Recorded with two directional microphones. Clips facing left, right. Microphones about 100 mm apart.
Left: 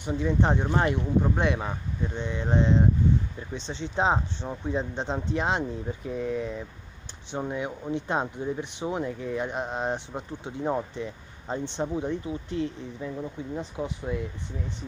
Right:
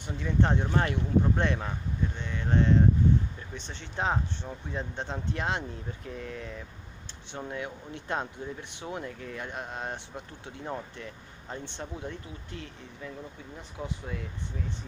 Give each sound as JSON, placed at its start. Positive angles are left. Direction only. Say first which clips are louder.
{"t": 0.2, "sound": "speech", "louder": "left 2 dB", "side_deg": 20}
{"t": 1.3, "sound": "speech", "louder": "left 3 dB", "side_deg": 10}
{"t": 2.1, "sound": "speech", "louder": "left 3 dB", "side_deg": 20}